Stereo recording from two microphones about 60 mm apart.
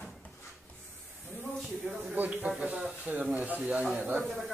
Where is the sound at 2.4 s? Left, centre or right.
Right.